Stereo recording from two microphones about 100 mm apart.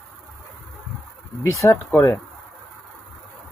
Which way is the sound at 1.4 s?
30° left (ahead or behind).